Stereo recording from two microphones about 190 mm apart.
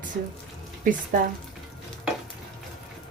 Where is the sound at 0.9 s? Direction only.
45° right (ahead or behind).